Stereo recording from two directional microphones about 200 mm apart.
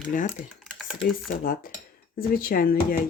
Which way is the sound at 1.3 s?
40° left (ahead or behind).